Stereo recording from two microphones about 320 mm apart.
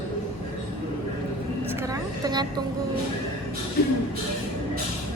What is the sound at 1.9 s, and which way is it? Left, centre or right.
Vehicle, centre.